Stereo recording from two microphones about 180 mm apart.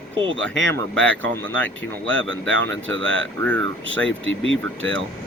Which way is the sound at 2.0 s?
90° right.